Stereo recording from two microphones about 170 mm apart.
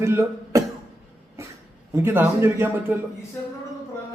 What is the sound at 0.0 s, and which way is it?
Speech, 15° right (ahead or behind).